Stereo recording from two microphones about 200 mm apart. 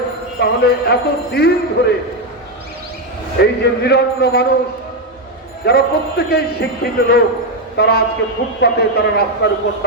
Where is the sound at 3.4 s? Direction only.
55° left (ahead or behind).